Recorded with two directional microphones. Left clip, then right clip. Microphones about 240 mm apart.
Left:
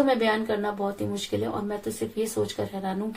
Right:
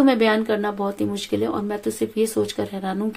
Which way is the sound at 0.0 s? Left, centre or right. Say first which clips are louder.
Right 5 dB; right.